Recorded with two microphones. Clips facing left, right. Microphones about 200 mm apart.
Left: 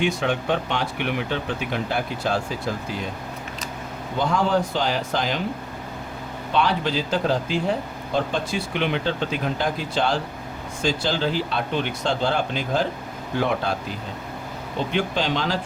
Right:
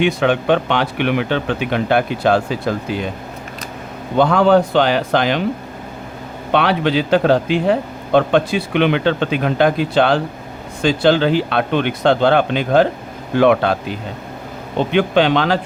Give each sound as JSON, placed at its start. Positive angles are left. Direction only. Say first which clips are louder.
{"t": 0.0, "sound": "speech", "louder": "right 7 dB", "side_deg": -70}
{"t": 4.2, "sound": "speech", "louder": "right 9 dB", "side_deg": -65}
{"t": 6.5, "sound": "speech", "louder": "right 7 dB", "side_deg": -70}